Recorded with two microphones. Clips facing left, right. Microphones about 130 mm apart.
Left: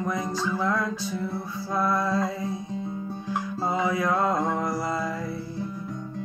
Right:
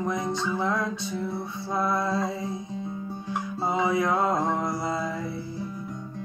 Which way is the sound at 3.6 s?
20° right (ahead or behind).